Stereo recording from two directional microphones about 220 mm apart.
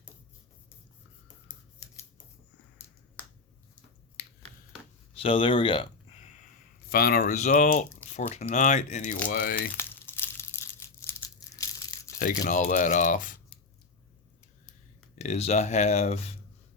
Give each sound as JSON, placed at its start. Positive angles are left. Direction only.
{"t": 5.1, "sound": "speech", "side_deg": 25}
{"t": 6.9, "sound": "speech", "side_deg": 45}
{"t": 9.7, "sound": "crumpling", "side_deg": 10}
{"t": 12.2, "sound": "speech", "side_deg": 35}
{"t": 15.1, "sound": "speech", "side_deg": 30}